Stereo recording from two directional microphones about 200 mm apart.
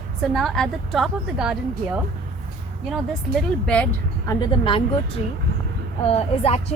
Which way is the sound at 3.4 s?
5° left (ahead or behind).